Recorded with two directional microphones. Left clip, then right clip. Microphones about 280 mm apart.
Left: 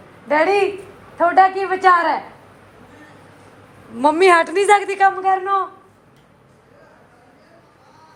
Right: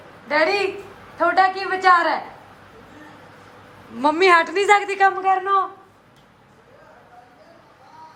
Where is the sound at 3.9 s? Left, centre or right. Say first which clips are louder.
Left 2 dB; centre.